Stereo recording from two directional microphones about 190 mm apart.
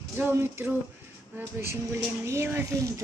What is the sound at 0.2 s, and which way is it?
A woman's voice, 10° right (ahead or behind).